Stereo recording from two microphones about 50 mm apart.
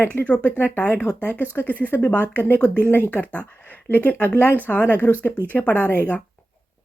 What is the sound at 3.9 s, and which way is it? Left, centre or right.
Speech, left.